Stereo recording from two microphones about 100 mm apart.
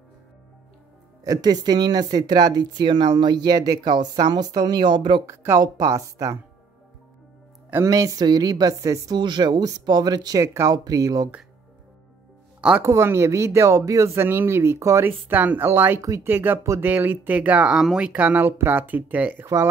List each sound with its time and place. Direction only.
1.2 s speech: 40° right (ahead or behind)
5.2 s speech: 30° right (ahead or behind)
7.7 s speech: 35° right (ahead or behind)
9.2 s speech: 45° right (ahead or behind)
12.5 s music: 10° right (ahead or behind)
12.8 s speech: 30° right (ahead or behind)
15.0 s speech: 20° right (ahead or behind)
19.4 s speech: 30° right (ahead or behind)